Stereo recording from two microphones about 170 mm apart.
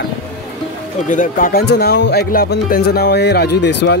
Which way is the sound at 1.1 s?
50° left (ahead or behind).